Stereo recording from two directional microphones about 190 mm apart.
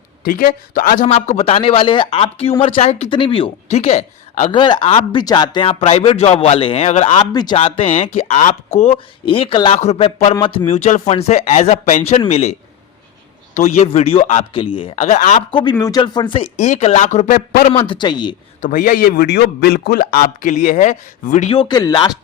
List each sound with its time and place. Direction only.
0.3 s speech: 45° left (ahead or behind)
4.6 s speech: 25° left (ahead or behind)
10.7 s speech: 40° left (ahead or behind)
15.7 s speech: 20° left (ahead or behind); by 17.6 s 45° left (ahead or behind)
17.7 s speech: 30° left (ahead or behind)
18.6 s a man's voice: 45° left (ahead or behind)
21.5 s speech: 20° left (ahead or behind)